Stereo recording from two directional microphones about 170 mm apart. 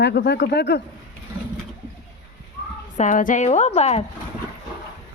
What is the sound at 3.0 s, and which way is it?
A woman's voice, 50° left (ahead or behind).